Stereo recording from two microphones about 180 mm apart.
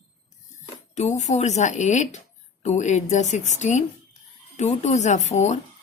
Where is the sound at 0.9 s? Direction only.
40° left (ahead or behind).